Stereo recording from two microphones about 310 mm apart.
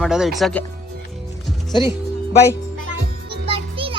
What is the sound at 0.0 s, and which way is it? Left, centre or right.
Speech, centre.